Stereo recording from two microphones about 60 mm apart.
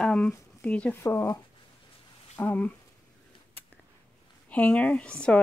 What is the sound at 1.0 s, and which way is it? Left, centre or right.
Speech, left.